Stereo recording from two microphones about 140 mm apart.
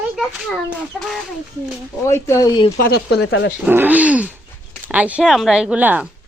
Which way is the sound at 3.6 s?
15° right (ahead or behind).